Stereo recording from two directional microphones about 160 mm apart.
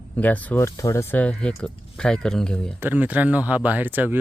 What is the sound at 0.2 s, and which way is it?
Speech, 10° left (ahead or behind).